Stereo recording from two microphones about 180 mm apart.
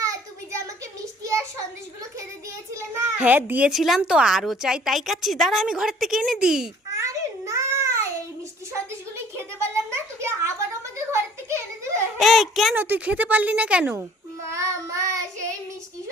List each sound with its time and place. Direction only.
0.0 s child singing: 15° right (ahead or behind)
2.7 s a child's voice: 10° right (ahead or behind)
6.9 s a sound: 15° right (ahead or behind)
9.1 s a sound: 15° right (ahead or behind)
12.1 s a child's voice: centre (ahead or behind)
14.5 s child singing: 15° right (ahead or behind)